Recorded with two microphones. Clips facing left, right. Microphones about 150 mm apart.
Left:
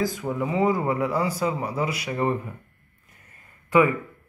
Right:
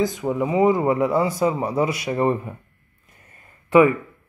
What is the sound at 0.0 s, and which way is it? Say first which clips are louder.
Speech: right 4 dB; 20° right (ahead or behind).